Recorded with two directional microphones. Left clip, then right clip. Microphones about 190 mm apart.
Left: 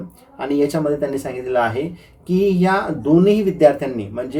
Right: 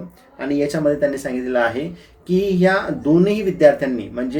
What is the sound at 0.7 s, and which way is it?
Speech, 15° right (ahead or behind).